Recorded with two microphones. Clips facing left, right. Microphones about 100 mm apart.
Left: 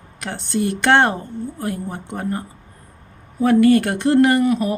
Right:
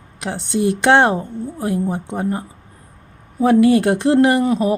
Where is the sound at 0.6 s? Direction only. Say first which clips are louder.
Right 2 dB; 25° right (ahead or behind).